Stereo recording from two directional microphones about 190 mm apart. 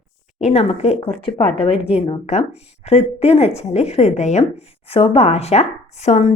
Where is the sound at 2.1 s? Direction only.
35° left (ahead or behind).